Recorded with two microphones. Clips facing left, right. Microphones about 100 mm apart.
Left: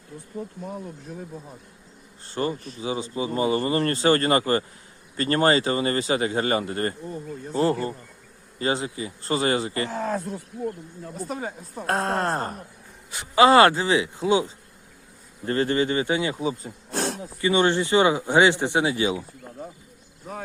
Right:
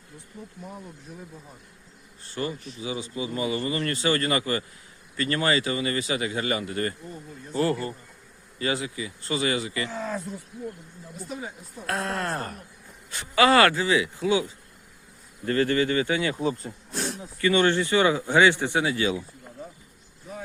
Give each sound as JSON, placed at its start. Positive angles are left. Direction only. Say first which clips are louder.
{"t": 2.2, "sound": "speech", "louder": "left 4 dB", "side_deg": 35}
{"t": 9.9, "sound": "speech", "louder": "left 4 dB", "side_deg": 55}
{"t": 11.3, "sound": "speech", "louder": "left 2 dB", "side_deg": 50}
{"t": 13.1, "sound": "speech", "louder": "left 4 dB", "side_deg": 20}
{"t": 16.4, "sound": "speech", "louder": "even", "side_deg": 10}
{"t": 16.9, "sound": "snake", "louder": "left 5 dB", "side_deg": 75}
{"t": 17.3, "sound": "speech", "louder": "even", "side_deg": 20}
{"t": 20.3, "sound": "vehicle", "louder": "left 3 dB", "side_deg": 45}